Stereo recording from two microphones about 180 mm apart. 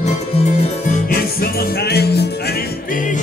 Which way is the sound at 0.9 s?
55° left (ahead or behind).